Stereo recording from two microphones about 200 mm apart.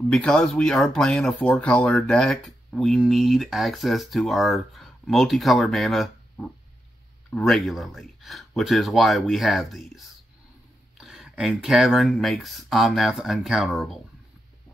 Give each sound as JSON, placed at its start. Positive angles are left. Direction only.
{"t": 0.1, "sound": "speech", "side_deg": 5}